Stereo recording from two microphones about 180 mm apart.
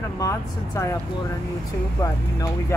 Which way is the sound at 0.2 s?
15° left (ahead or behind).